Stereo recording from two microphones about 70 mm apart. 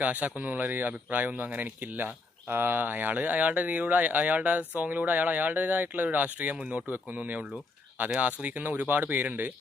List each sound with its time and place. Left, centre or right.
0.0 s speech: right
6.9 s speech: right